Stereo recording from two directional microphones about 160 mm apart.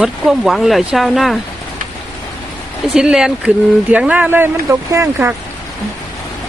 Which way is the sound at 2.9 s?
5° right (ahead or behind).